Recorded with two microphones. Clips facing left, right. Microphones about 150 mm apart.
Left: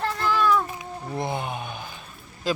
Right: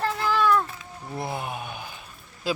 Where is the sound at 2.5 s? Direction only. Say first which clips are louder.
Left 2 dB; 10° right (ahead or behind).